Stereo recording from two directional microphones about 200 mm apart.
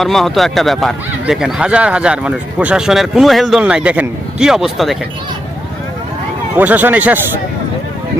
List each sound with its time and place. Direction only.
0.0 s speech: centre (ahead or behind)
6.6 s speech: 10° right (ahead or behind)